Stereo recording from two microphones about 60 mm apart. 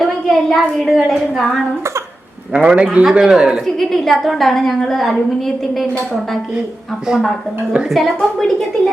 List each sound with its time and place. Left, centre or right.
0.0 s a woman's voice: centre
2.5 s a man's voice: right
3.0 s a man's voice: centre
3.8 s a woman's voice: centre
7.1 s a woman's voice: centre